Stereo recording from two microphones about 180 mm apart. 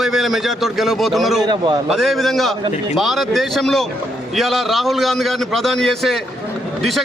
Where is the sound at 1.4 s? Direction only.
25° right (ahead or behind).